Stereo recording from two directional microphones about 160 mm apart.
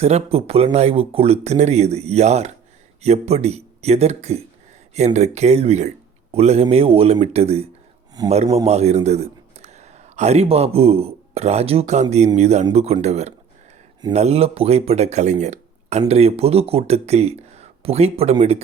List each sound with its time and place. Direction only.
0.0 s speech: 40° right (ahead or behind)
8.2 s a man's voice: 25° right (ahead or behind)
8.5 s a man's voice: 40° right (ahead or behind)